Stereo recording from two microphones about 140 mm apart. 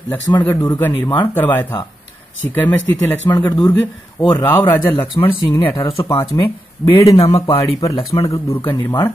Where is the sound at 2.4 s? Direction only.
10° left (ahead or behind).